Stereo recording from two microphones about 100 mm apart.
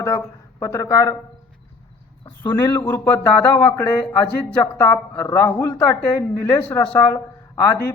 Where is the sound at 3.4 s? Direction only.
40° left (ahead or behind).